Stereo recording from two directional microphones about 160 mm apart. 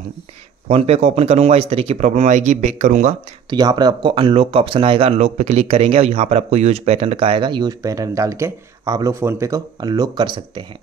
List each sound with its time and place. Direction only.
0.7 s speech: 40° right (ahead or behind)
3.4 s speech: 25° right (ahead or behind)
5.1 s speech: 45° right (ahead or behind); by 10.6 s 30° right (ahead or behind)